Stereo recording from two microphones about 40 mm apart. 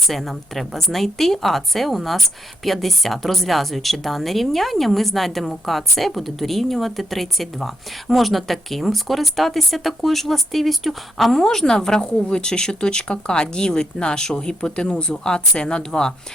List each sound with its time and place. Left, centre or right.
0.1 s a woman's voice: centre
12.0 s speech: left